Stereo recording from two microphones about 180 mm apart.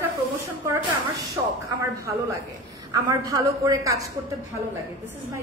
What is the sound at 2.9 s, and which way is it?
A woman's voice, 20° right (ahead or behind).